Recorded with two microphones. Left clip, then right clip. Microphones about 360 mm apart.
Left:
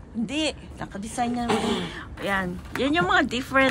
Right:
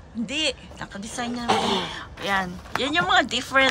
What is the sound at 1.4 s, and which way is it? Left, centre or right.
Speech, right.